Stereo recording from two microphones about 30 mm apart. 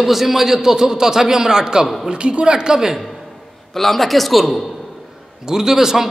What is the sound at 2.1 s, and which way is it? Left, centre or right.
Speech, right.